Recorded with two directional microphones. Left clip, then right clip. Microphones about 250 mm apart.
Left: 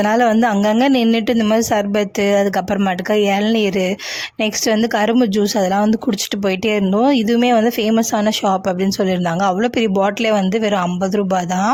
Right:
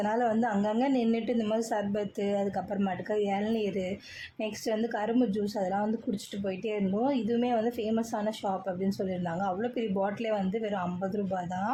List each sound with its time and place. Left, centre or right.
0.0 s speech: left